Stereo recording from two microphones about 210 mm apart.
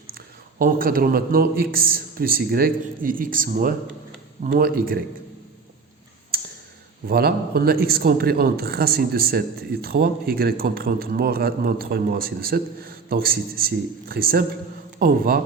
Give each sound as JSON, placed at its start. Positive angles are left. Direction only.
{"t": 0.6, "sound": "a man's voice", "side_deg": -40}
{"t": 7.1, "sound": "a man's voice", "side_deg": -45}